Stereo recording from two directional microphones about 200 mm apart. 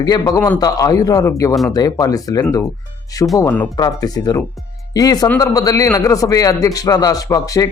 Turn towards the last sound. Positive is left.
turn(degrees=15)  # may be behind; listen again after turning